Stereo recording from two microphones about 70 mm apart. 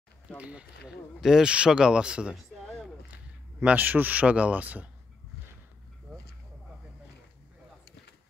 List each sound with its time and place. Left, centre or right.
0.4 s speech: centre
2.6 s a sound: centre
3.1 s speech: right